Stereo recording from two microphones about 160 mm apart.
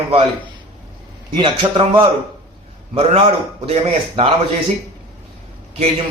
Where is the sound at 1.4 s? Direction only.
30° right (ahead or behind).